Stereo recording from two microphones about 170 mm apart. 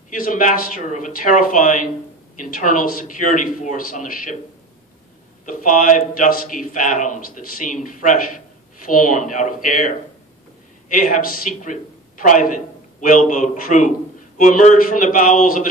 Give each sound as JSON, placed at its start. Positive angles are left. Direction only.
{"t": 0.1, "sound": "a man's voice", "side_deg": 55}
{"t": 5.4, "sound": "a man's voice", "side_deg": 50}